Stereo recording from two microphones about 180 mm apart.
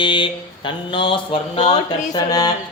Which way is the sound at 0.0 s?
25° left (ahead or behind).